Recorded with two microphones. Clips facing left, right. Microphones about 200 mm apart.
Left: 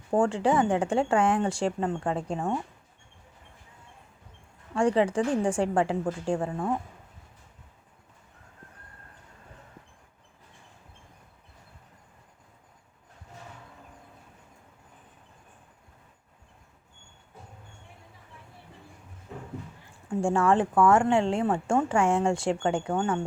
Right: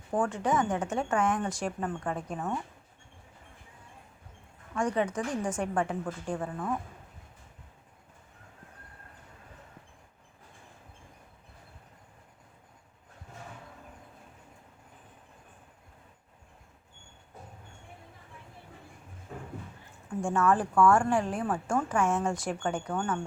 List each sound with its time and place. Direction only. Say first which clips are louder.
0.1 s speech: left 5 dB; 30° left (ahead or behind)
4.7 s speech: left 6 dB; 30° left (ahead or behind)
20.1 s speech: left 3 dB; 30° left (ahead or behind)